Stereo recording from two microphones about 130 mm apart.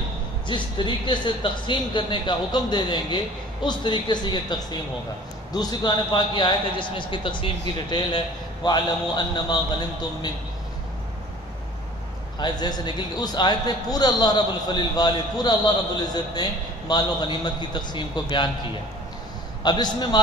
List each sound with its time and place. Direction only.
0.5 s a man's voice: 35° left (ahead or behind)
12.4 s a man's voice: 35° left (ahead or behind)
19.6 s a man's voice: 35° left (ahead or behind)